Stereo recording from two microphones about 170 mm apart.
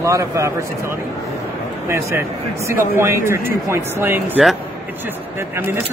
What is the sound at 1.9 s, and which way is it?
A man's voice, 15° right (ahead or behind).